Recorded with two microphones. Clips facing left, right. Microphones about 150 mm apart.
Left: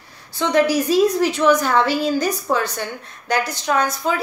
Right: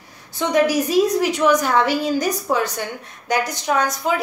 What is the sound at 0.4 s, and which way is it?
A woman's voice, 15° right (ahead or behind).